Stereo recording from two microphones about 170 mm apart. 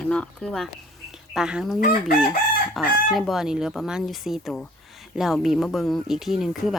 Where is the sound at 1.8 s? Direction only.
60° left (ahead or behind).